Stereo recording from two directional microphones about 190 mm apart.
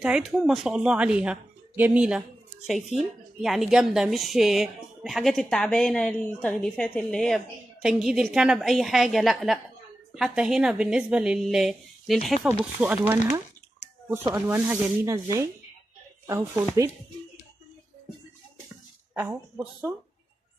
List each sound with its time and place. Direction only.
0.0 s speech: 5° right (ahead or behind)
16.3 s speech: 15° right (ahead or behind)
19.1 s speech: 10° right (ahead or behind)